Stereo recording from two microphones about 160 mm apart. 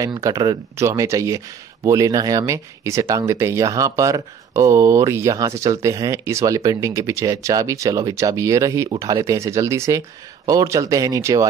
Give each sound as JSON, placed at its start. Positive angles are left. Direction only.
{"t": 0.0, "sound": "speech", "side_deg": -20}